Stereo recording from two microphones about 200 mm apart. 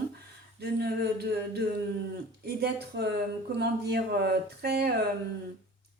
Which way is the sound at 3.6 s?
55° right (ahead or behind).